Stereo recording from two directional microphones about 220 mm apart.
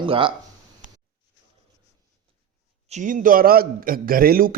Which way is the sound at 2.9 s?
35° right (ahead or behind).